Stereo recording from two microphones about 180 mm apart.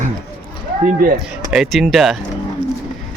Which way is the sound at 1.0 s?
55° right (ahead or behind).